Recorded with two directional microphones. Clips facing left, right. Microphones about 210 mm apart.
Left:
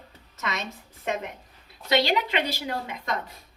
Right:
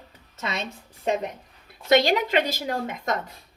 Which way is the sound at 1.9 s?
45° right (ahead or behind).